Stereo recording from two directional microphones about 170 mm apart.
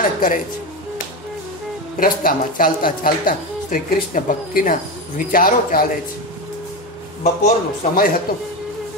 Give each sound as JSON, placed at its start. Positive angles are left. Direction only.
{"t": 0.0, "sound": "music", "side_deg": 50}
{"t": 2.0, "sound": "a woman's voice", "side_deg": 55}
{"t": 7.4, "sound": "a woman's voice", "side_deg": 55}